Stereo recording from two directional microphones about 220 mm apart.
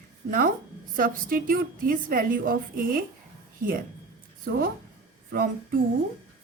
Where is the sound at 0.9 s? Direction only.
40° right (ahead or behind).